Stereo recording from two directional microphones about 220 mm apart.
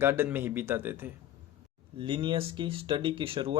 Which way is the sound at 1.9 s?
20° right (ahead or behind).